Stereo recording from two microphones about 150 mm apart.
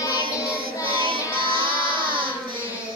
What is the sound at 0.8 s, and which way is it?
Child singing, 35° right (ahead or behind).